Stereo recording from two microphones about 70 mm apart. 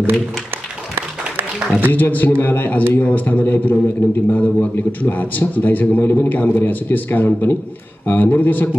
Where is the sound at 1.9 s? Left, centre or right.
Left.